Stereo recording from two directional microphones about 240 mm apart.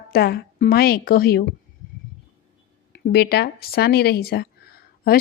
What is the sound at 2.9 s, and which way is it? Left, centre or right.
A woman's voice, left.